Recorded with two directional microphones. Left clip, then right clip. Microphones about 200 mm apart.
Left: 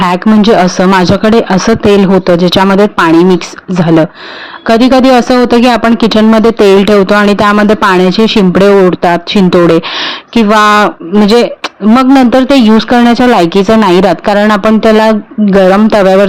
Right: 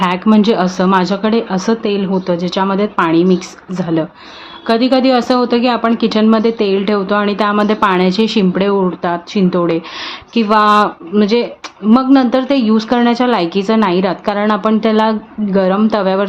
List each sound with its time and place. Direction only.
0.0 s speech: 35° left (ahead or behind)